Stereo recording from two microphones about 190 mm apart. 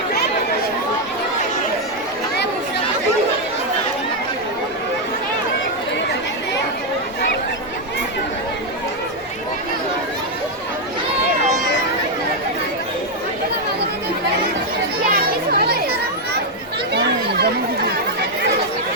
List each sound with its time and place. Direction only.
15.1 s children playing: 55° right (ahead or behind)
16.9 s chatter: 60° right (ahead or behind)